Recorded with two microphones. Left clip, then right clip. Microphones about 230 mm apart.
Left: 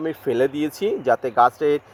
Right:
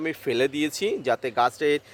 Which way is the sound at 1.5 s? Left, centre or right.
Right.